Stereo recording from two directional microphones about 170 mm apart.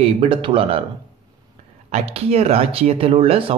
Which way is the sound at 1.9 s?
40° right (ahead or behind).